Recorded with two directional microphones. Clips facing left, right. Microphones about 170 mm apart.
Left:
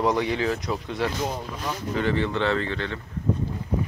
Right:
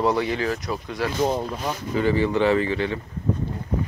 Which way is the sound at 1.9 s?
5° right (ahead or behind).